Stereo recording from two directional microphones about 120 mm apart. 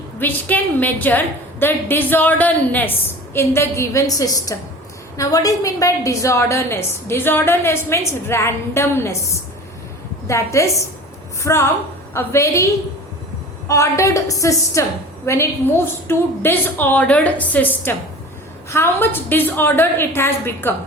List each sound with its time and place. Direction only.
0.2 s a woman's voice: 15° left (ahead or behind)